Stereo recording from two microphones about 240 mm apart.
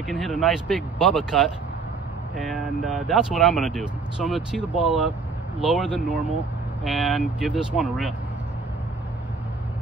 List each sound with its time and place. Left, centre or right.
0.0 s speech: centre